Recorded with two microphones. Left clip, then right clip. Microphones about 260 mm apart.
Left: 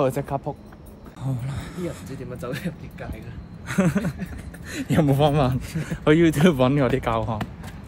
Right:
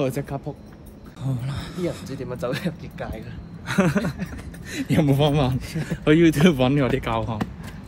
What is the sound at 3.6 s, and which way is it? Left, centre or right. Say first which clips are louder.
Speech: right 2 dB; centre.